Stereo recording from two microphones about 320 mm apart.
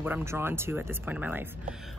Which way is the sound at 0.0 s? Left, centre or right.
Centre.